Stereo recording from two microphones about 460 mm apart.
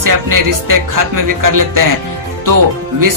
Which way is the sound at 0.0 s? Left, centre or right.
Right.